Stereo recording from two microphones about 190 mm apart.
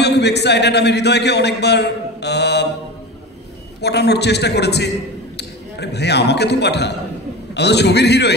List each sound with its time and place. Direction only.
0.0 s a man's voice: 60° left (ahead or behind)
3.8 s a man's voice: 60° left (ahead or behind)